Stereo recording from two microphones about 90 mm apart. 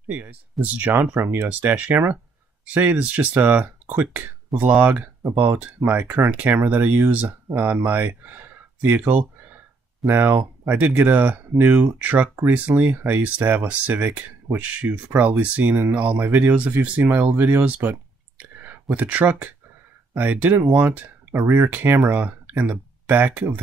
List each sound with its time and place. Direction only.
0.1 s speech: 15° right (ahead or behind)
18.4 s a sound: 20° right (ahead or behind)
20.2 s speech: 20° right (ahead or behind)